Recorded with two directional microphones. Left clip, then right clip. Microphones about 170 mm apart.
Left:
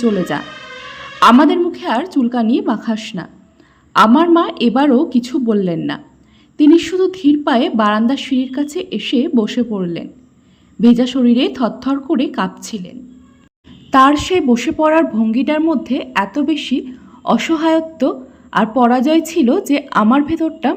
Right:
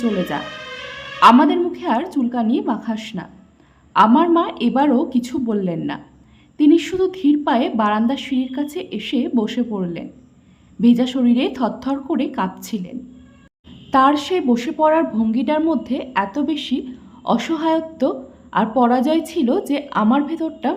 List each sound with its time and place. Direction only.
0.0 s a woman's voice: 20° left (ahead or behind)